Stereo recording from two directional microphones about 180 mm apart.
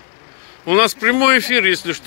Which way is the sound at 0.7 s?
20° left (ahead or behind).